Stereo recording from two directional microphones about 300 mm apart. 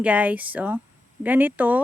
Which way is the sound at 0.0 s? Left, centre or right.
Centre.